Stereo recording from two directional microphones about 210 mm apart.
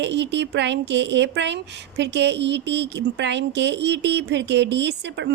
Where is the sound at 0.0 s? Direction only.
55° right (ahead or behind).